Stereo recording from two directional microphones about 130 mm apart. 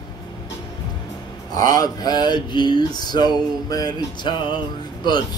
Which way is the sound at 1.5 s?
25° left (ahead or behind).